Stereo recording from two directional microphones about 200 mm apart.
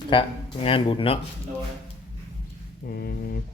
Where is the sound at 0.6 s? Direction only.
25° left (ahead or behind).